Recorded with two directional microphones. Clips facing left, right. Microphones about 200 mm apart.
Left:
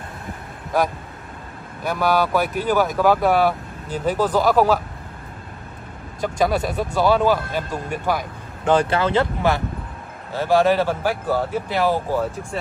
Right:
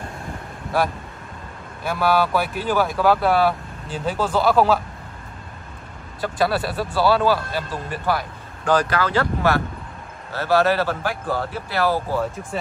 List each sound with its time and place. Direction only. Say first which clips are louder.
2.0 s a man's voice: even; 15° left (ahead or behind)
2.4 s speech: left 3 dB; 45° left (ahead or behind)
3.0 s a man's voice: even; 15° left (ahead or behind)
6.2 s a man's voice: left 1 dB; 15° left (ahead or behind)
8.7 s a man's voice: left 2 dB; 25° left (ahead or behind)